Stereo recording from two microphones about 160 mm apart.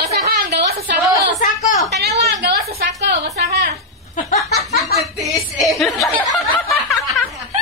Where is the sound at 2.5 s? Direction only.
85° right.